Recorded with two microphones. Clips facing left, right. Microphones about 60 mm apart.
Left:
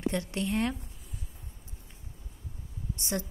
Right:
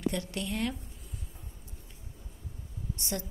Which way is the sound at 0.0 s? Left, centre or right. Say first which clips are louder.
Left 2 dB; left.